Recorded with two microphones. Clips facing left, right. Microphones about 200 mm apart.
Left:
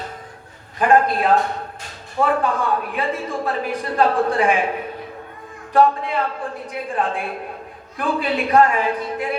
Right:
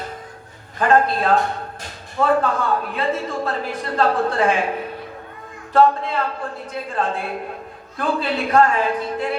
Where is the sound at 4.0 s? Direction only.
15° left (ahead or behind).